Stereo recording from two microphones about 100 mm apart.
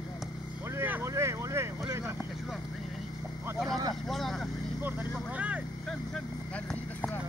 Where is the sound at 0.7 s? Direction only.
20° right (ahead or behind).